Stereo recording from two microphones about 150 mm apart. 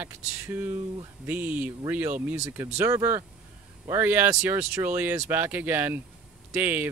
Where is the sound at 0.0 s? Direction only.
15° right (ahead or behind).